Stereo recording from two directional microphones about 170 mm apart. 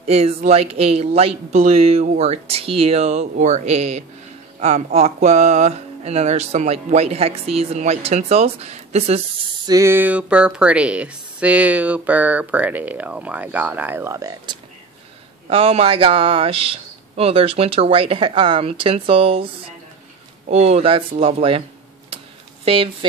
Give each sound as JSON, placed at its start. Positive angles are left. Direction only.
{"t": 0.0, "sound": "speech", "side_deg": -40}
{"t": 9.7, "sound": "speech", "side_deg": -15}
{"t": 15.5, "sound": "speech", "side_deg": -35}